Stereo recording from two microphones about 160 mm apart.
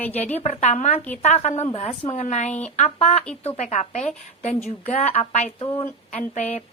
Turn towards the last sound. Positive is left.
turn(degrees=45)  # may be behind; listen again after turning